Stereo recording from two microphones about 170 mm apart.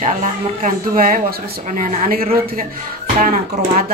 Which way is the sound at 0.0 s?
45° right (ahead or behind).